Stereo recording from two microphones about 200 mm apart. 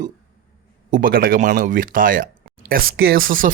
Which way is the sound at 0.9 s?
45° right (ahead or behind).